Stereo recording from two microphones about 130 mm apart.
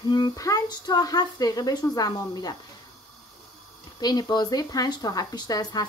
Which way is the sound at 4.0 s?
30° left (ahead or behind).